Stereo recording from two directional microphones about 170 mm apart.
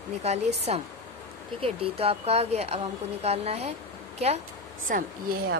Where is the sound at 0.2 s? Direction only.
40° right (ahead or behind).